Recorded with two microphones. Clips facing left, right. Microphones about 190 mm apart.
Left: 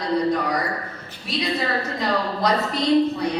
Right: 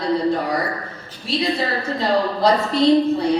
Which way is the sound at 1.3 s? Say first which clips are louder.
Right 3 dB; 30° right (ahead or behind).